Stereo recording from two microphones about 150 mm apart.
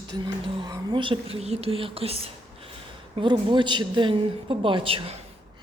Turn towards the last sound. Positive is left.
turn(degrees=-35)  # may be behind; listen again after turning